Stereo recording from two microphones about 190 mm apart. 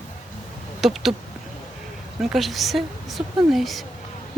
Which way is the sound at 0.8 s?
Centre (ahead or behind).